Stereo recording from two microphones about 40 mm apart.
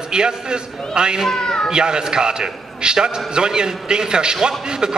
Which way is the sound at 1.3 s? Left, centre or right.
Centre.